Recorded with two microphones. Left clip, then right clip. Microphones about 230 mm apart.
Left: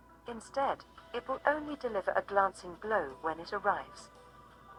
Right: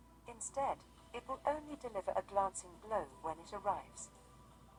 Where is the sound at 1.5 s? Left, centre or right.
Left.